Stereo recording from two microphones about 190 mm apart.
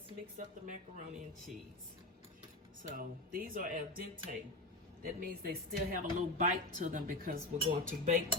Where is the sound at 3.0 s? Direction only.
50° right (ahead or behind).